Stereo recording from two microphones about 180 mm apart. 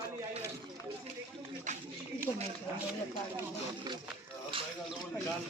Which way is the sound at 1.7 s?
40° right (ahead or behind).